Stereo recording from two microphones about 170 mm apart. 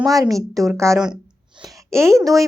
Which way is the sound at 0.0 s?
20° right (ahead or behind).